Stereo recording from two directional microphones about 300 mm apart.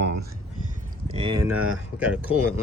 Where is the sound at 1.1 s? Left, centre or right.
Centre.